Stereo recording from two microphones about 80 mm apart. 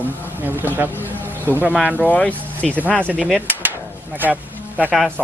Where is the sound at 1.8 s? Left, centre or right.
Centre.